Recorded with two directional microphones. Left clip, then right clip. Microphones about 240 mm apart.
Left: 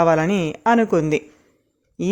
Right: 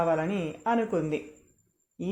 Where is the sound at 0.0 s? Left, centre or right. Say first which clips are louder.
Left 10 dB; left.